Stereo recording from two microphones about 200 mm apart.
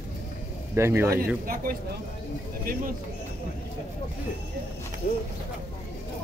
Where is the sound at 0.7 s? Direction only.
10° right (ahead or behind).